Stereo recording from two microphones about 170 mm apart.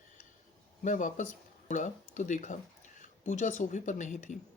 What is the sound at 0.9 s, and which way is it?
Speech, 45° left (ahead or behind).